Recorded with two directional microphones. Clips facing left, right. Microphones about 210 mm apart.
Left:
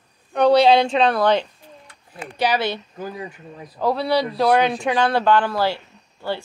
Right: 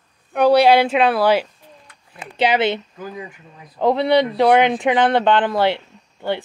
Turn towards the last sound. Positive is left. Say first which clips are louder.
# right 3 dB
turn(degrees=-20)  # may be behind; listen again after turning